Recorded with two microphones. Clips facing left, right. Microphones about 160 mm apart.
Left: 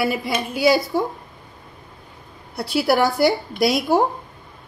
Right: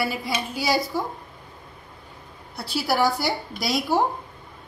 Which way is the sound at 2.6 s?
60° left (ahead or behind).